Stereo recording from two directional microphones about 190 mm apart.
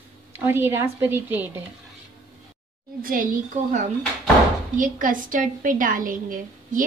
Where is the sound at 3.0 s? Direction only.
45° right (ahead or behind).